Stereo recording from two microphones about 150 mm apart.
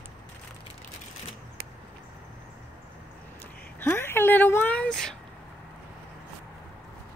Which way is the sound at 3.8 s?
15° left (ahead or behind).